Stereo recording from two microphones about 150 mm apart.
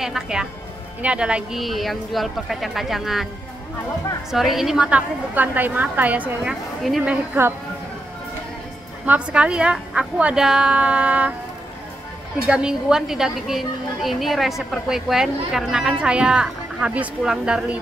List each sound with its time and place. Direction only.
0.0 s a woman's voice: 5° right (ahead or behind)
4.3 s a woman's voice: centre (ahead or behind)
9.0 s speech: 10° right (ahead or behind)
12.4 s a woman's voice: 5° right (ahead or behind)